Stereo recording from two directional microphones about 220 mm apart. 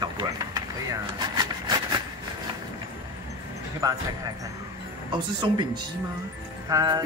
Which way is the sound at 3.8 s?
15° right (ahead or behind).